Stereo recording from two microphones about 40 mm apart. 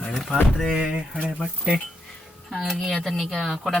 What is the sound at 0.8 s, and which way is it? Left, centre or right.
Speech, centre.